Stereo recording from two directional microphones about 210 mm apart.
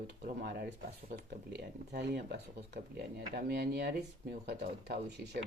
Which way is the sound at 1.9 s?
50° right (ahead or behind).